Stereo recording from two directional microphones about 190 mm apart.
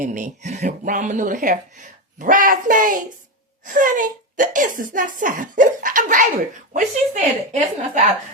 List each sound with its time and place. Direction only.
0.0 s speech: 40° right (ahead or behind)